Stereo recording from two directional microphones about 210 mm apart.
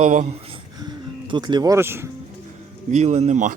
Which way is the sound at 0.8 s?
20° right (ahead or behind).